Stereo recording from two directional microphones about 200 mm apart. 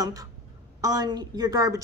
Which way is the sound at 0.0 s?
15° right (ahead or behind).